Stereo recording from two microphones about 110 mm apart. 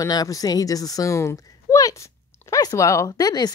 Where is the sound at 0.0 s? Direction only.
35° left (ahead or behind).